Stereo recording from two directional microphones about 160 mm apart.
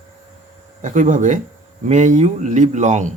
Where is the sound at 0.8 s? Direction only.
50° right (ahead or behind).